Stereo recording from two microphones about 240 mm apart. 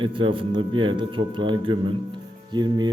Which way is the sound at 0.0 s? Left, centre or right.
Right.